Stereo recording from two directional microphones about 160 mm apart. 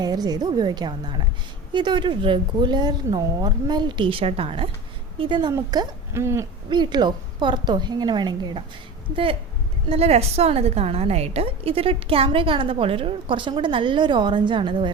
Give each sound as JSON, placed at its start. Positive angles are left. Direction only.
{"t": 0.0, "sound": "speech", "side_deg": -25}
{"t": 6.7, "sound": "speech", "side_deg": -30}
{"t": 9.9, "sound": "a woman's voice", "side_deg": -40}